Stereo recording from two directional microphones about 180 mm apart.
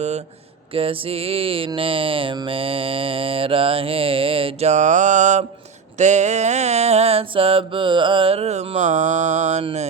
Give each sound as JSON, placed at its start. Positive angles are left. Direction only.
{"t": 0.7, "sound": "mantra", "side_deg": -30}